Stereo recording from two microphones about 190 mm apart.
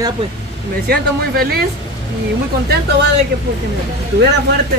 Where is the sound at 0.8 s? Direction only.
55° right (ahead or behind).